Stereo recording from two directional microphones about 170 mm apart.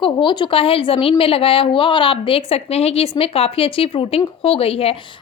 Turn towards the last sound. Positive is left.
turn(degrees=35)  # may be behind; listen again after turning